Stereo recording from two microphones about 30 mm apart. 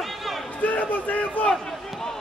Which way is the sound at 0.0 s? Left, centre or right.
Centre.